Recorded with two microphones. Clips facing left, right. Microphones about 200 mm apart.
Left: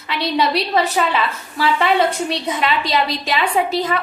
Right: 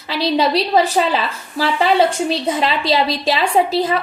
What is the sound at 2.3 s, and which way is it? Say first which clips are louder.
A woman's voice: right 2 dB; 30° right (ahead or behind).